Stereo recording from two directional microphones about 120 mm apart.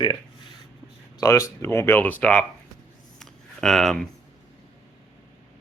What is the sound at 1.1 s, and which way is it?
Speech, 25° left (ahead or behind).